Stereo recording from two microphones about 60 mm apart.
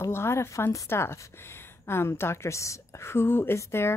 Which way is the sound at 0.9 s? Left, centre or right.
Left.